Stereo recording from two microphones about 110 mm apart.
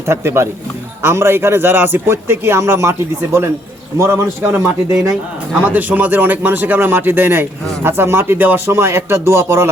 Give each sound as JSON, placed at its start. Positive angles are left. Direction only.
{"t": 0.1, "sound": "a man's voice", "side_deg": -25}
{"t": 3.9, "sound": "a man's voice", "side_deg": -25}